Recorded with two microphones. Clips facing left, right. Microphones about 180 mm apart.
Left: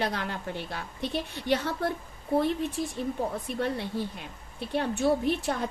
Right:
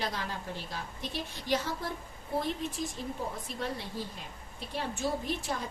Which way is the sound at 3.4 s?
60° left (ahead or behind).